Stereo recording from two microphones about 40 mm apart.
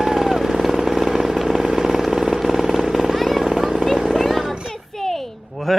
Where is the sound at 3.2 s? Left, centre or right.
Centre.